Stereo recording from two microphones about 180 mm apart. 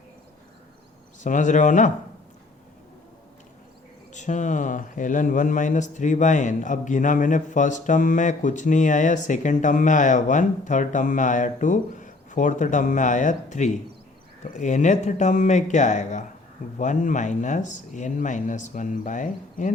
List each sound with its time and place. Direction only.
1.2 s speech: 45° left (ahead or behind)
4.1 s speech: 40° left (ahead or behind)